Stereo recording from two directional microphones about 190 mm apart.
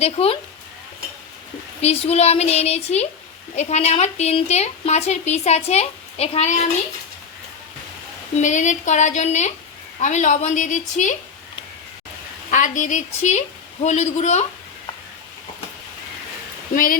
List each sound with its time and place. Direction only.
0.0 s a woman's voice: 30° left (ahead or behind)
1.8 s a woman's voice: 35° left (ahead or behind)
8.4 s a woman's voice: 40° left (ahead or behind)
12.5 s a woman's voice: 40° left (ahead or behind)
16.7 s speech: 50° left (ahead or behind)